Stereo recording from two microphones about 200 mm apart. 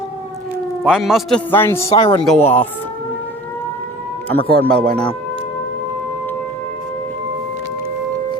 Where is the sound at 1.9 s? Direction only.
25° left (ahead or behind).